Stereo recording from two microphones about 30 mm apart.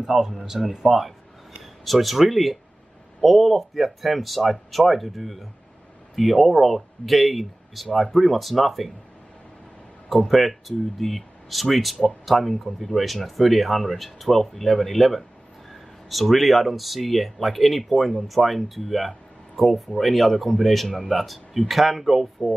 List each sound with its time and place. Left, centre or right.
0.0 s speech: centre
0.8 s speech: right
1.6 s speech: centre
10.0 s speech: centre